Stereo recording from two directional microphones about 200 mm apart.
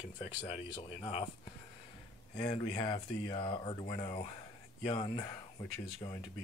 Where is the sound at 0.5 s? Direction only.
25° left (ahead or behind).